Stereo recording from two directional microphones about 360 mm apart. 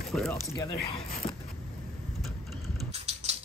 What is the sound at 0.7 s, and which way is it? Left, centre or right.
Speech, centre.